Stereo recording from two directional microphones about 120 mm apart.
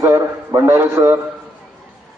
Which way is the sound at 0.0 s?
25° right (ahead or behind).